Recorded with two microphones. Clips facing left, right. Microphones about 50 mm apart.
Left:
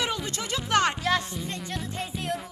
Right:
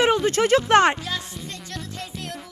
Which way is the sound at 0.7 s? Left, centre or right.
Right.